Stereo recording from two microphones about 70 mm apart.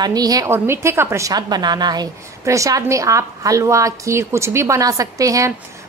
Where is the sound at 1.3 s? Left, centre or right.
Right.